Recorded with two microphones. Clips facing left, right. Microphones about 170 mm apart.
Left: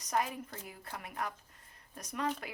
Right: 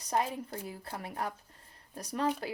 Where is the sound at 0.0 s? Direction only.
30° right (ahead or behind).